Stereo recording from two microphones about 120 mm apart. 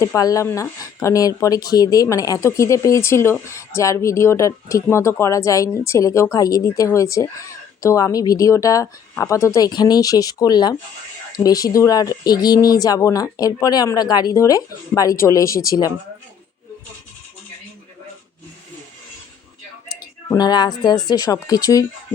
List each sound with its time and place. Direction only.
0.2 s a woman's voice: 30° left (ahead or behind)
20.3 s a woman's voice: 35° left (ahead or behind)